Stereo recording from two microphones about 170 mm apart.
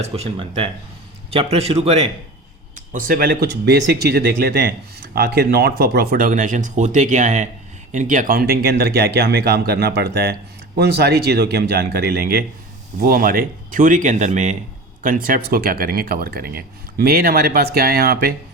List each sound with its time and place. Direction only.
0.0 s speech: 35° right (ahead or behind)
2.9 s speech: 55° right (ahead or behind)